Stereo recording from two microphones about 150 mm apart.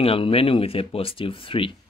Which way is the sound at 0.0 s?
40° left (ahead or behind).